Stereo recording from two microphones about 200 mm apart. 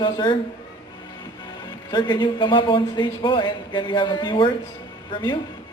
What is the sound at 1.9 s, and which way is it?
A man's voice, 20° left (ahead or behind).